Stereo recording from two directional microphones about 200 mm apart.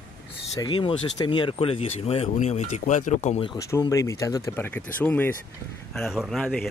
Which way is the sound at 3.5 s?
20° left (ahead or behind).